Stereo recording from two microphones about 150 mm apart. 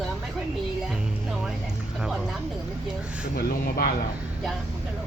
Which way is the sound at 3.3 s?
90° left.